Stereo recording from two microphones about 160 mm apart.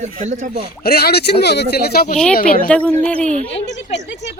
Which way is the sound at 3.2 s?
50° right (ahead or behind).